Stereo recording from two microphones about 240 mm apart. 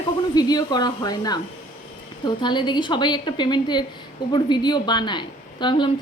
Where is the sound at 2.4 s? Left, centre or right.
Centre.